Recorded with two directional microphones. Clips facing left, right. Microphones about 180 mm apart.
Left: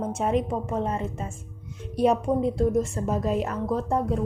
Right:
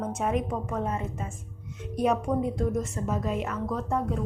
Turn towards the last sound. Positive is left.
turn(degrees=35)  # may be behind; listen again after turning